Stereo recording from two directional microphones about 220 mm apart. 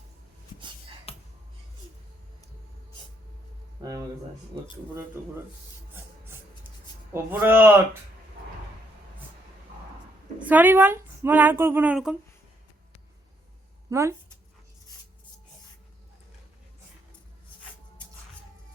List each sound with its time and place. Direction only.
1.1 s finger snapping: 25° left (ahead or behind)
3.8 s a sound: 15° right (ahead or behind)
5.2 s speech: 10° right (ahead or behind)
7.1 s speech: 10° right (ahead or behind)
10.4 s speech: 5° right (ahead or behind)
13.9 s speech: 10° right (ahead or behind)